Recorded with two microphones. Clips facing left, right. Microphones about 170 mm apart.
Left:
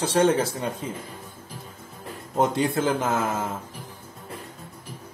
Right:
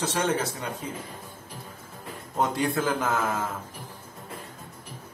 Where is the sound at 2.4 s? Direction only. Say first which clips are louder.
Left 3 dB; 25° left (ahead or behind).